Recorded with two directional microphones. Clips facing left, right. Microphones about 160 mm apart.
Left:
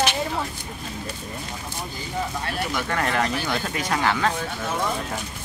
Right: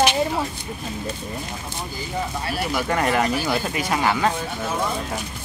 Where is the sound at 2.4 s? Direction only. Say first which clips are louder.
Right 3 dB; 10° right (ahead or behind).